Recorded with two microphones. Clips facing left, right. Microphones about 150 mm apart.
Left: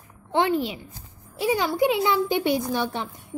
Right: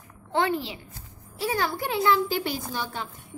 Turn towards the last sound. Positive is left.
turn(degrees=20)  # may be behind; listen again after turning